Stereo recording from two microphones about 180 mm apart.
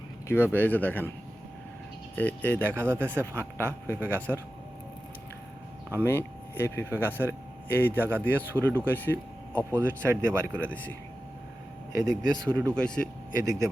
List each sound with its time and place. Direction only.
0.3 s speech: 10° left (ahead or behind)
2.1 s speech: 10° left (ahead or behind)
2.7 s speech: 15° right (ahead or behind)
3.3 s speech: 10° left (ahead or behind)
5.9 s speech: 10° left (ahead or behind)
9.6 s speech: 15° right (ahead or behind)
10.5 s speech: 5° left (ahead or behind)
12.5 s speech: 15° right (ahead or behind)
12.7 s speech: 5° left (ahead or behind)
13.4 s speech: 20° right (ahead or behind)